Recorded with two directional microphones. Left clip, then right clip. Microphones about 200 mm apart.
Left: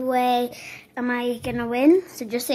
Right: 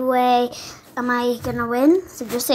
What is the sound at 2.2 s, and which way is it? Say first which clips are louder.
Speech: right 4 dB; 5° left (ahead or behind).